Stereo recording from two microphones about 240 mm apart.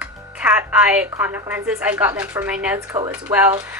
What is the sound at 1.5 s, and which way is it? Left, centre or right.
A woman's voice, centre.